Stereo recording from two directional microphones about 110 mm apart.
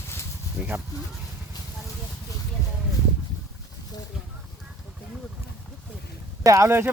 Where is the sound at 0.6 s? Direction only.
15° right (ahead or behind).